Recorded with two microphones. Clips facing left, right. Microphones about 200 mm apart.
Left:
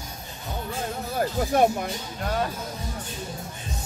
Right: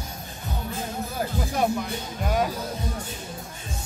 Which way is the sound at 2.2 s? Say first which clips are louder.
Right 2 dB; 10° right (ahead or behind).